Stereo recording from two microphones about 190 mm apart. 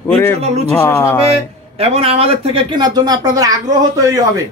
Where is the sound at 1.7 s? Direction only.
30° right (ahead or behind).